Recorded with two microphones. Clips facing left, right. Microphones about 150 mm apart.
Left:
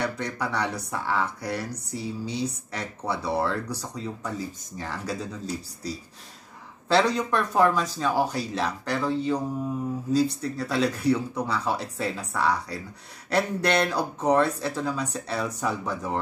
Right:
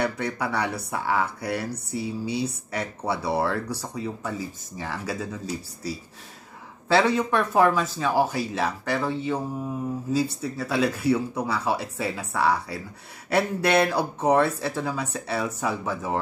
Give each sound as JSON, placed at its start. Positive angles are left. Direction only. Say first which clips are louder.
{"t": 0.0, "sound": "speech", "louder": "right 2 dB", "side_deg": -5}
{"t": 6.9, "sound": "speech", "louder": "right 1 dB", "side_deg": -5}